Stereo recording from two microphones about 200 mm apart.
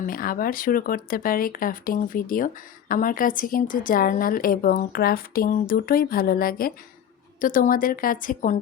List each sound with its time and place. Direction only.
0.0 s a woman's voice: 45° left (ahead or behind)